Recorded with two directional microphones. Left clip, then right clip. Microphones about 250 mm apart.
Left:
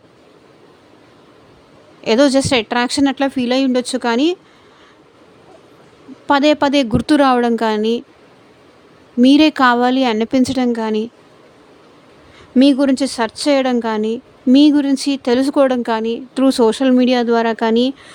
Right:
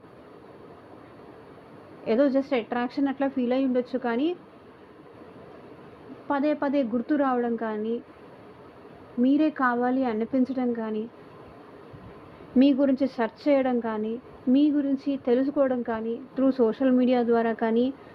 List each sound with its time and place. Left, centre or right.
2.0 s speech: left
6.2 s a woman's voice: left
9.2 s speech: left
12.5 s speech: left